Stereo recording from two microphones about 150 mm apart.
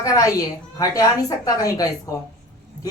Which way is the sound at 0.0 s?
20° left (ahead or behind).